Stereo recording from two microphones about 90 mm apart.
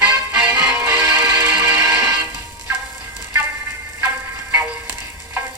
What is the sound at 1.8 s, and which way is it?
Music, 35° right (ahead or behind).